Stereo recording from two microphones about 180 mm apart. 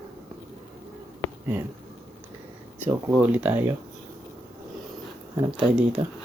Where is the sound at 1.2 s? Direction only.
10° left (ahead or behind).